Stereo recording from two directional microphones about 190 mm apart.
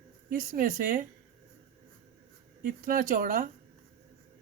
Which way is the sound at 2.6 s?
45° right (ahead or behind).